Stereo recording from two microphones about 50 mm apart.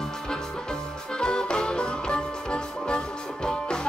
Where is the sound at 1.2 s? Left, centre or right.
Centre.